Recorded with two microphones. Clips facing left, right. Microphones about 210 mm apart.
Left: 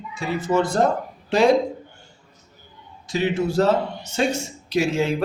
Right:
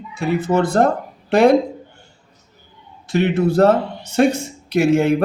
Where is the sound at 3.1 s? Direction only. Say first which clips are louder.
Right 5 dB; 60° right (ahead or behind).